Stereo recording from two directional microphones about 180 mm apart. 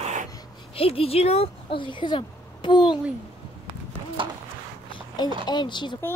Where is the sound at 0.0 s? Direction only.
40° right (ahead or behind).